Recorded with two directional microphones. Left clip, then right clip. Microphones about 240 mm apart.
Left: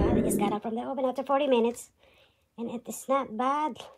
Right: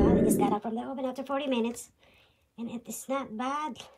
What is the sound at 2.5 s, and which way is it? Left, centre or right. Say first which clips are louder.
Speech: left 4 dB; centre.